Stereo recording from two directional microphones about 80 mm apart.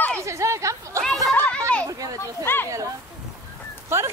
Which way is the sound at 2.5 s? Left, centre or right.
Left.